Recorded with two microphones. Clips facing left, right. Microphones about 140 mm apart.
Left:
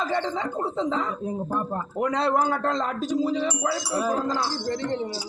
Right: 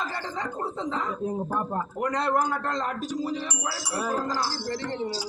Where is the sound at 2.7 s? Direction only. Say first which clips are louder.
Left 4 dB; 25° left (ahead or behind).